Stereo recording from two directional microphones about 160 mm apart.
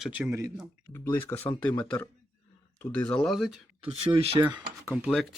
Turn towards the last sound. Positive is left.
turn(degrees=-10)  # may be behind; listen again after turning